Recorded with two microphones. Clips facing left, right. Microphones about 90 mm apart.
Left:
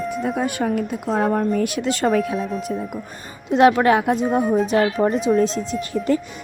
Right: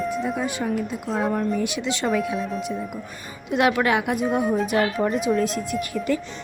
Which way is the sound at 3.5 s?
35° left (ahead or behind).